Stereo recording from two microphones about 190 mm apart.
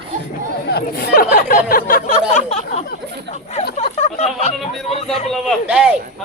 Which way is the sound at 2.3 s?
35° left (ahead or behind).